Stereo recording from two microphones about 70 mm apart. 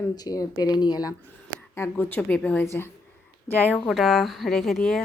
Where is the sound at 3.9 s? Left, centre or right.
Centre.